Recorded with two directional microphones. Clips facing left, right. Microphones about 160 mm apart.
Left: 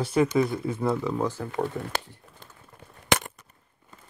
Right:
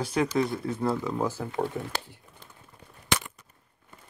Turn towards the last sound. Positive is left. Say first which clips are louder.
# left 4 dB
turn(degrees=45)  # may be behind; listen again after turning